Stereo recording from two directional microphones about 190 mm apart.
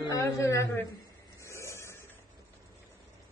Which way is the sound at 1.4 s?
15° left (ahead or behind).